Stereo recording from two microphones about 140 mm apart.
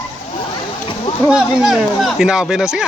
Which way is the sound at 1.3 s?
5° right (ahead or behind).